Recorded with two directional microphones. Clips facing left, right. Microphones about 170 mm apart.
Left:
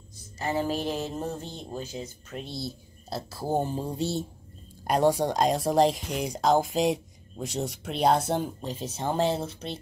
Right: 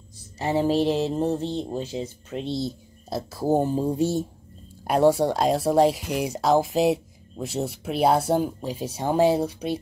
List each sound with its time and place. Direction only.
0.4 s speech: 30° right (ahead or behind)
3.4 s a sound: 5° right (ahead or behind)
4.8 s speech: 5° right (ahead or behind)